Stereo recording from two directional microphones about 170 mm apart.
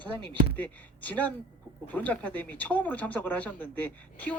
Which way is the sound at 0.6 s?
10° left (ahead or behind).